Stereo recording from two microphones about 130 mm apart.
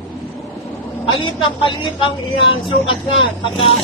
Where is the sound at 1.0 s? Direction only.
40° left (ahead or behind).